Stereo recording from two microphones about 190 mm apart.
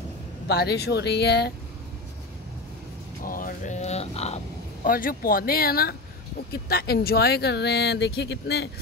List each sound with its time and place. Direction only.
0.5 s speech: 60° left (ahead or behind)
3.3 s speech: 45° left (ahead or behind)
4.8 s speech: 50° left (ahead or behind)